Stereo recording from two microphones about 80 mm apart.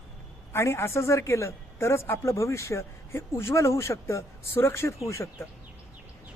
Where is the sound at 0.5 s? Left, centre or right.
Left.